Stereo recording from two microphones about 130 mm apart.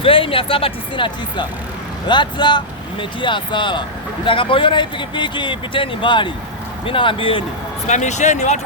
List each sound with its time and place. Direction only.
0.0 s speech: 45° left (ahead or behind)
7.9 s speech: 65° left (ahead or behind)